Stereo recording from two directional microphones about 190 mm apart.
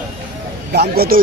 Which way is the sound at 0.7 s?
55° right (ahead or behind).